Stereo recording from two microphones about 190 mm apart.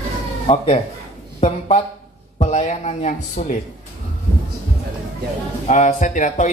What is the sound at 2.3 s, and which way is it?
Speech, 35° left (ahead or behind).